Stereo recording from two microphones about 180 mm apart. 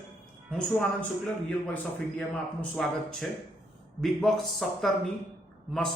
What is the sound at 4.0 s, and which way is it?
A man's voice, centre (ahead or behind).